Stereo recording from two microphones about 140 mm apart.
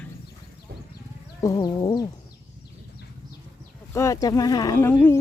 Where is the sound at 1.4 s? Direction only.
25° left (ahead or behind).